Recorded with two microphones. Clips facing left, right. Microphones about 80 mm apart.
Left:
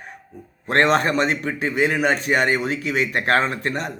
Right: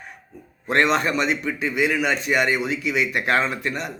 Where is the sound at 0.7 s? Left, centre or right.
Left.